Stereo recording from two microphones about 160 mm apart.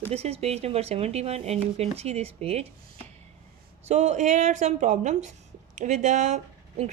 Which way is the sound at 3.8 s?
45° right (ahead or behind).